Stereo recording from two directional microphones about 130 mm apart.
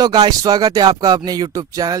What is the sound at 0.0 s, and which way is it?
Speech, 30° right (ahead or behind).